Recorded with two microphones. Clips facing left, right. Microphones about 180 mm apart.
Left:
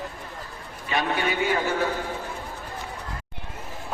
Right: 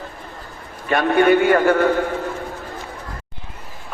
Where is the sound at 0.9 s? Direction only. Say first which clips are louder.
Right 11 dB; 55° right (ahead or behind).